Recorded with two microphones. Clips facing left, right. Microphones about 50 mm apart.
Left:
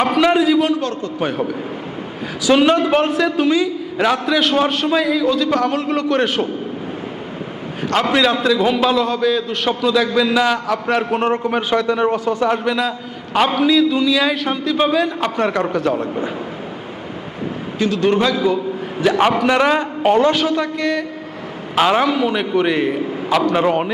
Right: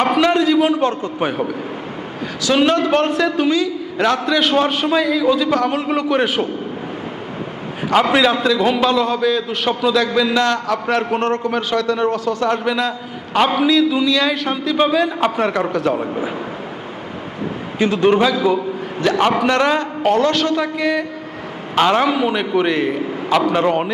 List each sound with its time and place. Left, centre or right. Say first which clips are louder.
0.0 s a man's voice: even; centre
0.7 s a man's voice: right 2 dB; right
1.2 s a man's voice: even; centre
2.6 s a man's voice: left 1 dB; centre
8.1 s a man's voice: even; centre; by 12.5 s left
12.5 s a man's voice: even; centre
17.7 s a man's voice: right 2 dB; right
19.0 s a woman's voice: left 1 dB; centre
20.6 s a man's voice: right 1 dB; centre
22.1 s a man's voice: even; centre